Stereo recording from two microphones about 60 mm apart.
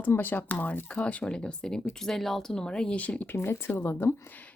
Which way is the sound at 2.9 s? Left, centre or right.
Left.